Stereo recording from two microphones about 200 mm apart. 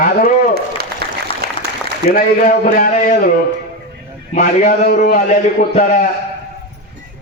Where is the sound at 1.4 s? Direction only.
50° right (ahead or behind).